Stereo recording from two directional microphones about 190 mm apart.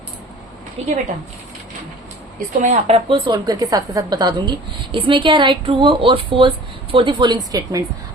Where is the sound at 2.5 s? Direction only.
35° right (ahead or behind).